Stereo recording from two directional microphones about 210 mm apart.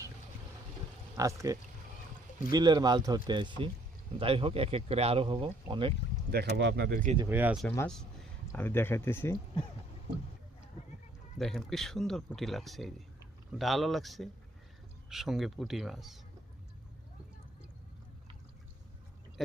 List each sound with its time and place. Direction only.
1.1 s speech: 15° right (ahead or behind)
6.3 s speech: 55° right (ahead or behind)
7.3 s speech: 10° right (ahead or behind); by 9.4 s 10° left (ahead or behind)
11.3 s speech: centre (ahead or behind)